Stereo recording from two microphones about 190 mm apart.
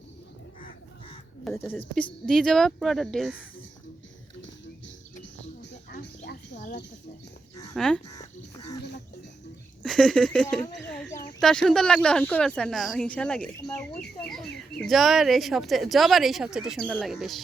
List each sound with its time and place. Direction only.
1.5 s a woman's voice: 10° left (ahead or behind)
6.0 s a sound: 65° left (ahead or behind)
7.8 s a woman's voice: 5° left (ahead or behind)
9.8 s speech: 5° left (ahead or behind)
10.8 s a sound: 5° left (ahead or behind)
11.3 s a woman's voice: centre (ahead or behind)
14.8 s a woman's voice: centre (ahead or behind)